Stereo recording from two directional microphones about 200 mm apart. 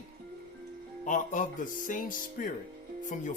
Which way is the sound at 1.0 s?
40° left (ahead or behind).